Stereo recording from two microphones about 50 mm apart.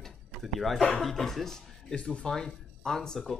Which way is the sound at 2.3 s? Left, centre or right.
Centre.